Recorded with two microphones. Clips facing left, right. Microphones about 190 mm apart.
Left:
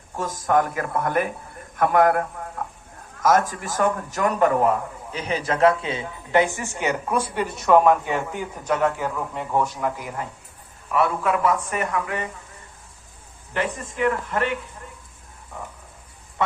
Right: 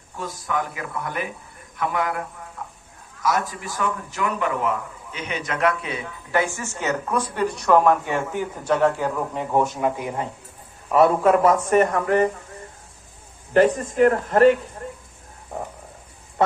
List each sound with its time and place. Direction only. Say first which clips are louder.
0.2 s a man's voice: left 6 dB; 45° left (ahead or behind); by 7.9 s centre (ahead or behind)
8.8 s speech: right 3 dB; 10° right (ahead or behind); by 10.2 s 25° right (ahead or behind)
10.9 s a man's voice: right 6 dB; 40° right (ahead or behind)
13.5 s a man's voice: right 10 dB; 40° right (ahead or behind)